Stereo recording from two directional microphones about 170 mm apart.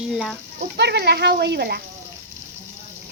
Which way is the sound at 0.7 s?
80° right.